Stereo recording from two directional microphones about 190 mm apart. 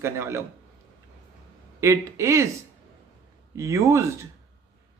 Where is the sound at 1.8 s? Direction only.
15° right (ahead or behind).